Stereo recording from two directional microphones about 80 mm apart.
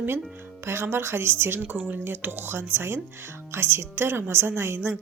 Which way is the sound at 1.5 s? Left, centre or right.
Centre.